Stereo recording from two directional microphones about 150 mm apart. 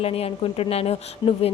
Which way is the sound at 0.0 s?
40° left (ahead or behind).